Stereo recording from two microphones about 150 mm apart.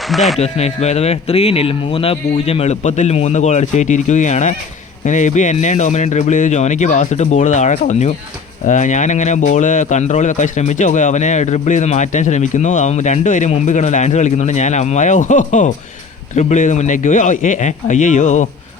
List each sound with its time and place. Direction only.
0.1 s speech: centre (ahead or behind)
0.3 s speech: 45° left (ahead or behind)